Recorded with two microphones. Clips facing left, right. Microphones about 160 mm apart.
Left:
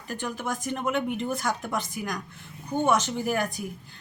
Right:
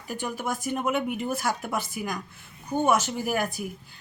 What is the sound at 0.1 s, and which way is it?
Speech, 10° right (ahead or behind).